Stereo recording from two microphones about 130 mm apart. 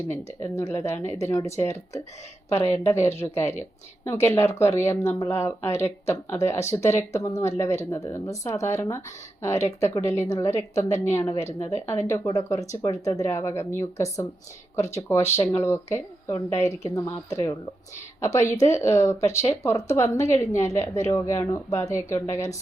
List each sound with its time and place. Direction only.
0.1 s speech: 20° left (ahead or behind)